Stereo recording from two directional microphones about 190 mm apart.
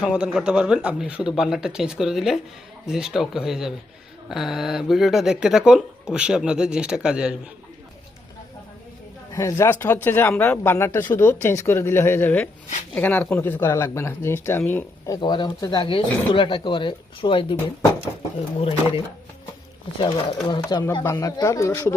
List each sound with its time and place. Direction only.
0.0 s speech: 5° right (ahead or behind)
9.3 s speech: 15° left (ahead or behind)
20.0 s speech: 25° left (ahead or behind)